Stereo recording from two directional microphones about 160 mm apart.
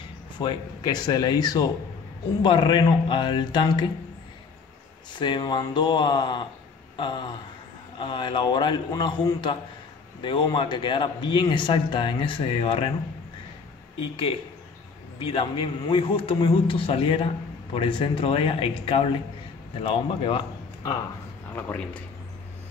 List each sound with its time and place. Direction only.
0.4 s a man's voice: 25° left (ahead or behind)
5.1 s a man's voice: 30° left (ahead or behind)
15.1 s a man's voice: 35° left (ahead or behind)
21.5 s speech: 10° left (ahead or behind)